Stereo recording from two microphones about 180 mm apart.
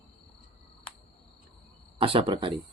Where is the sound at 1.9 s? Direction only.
30° right (ahead or behind).